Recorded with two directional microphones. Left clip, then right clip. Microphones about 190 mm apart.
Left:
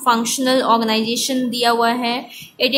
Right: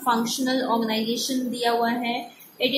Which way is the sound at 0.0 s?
25° left (ahead or behind).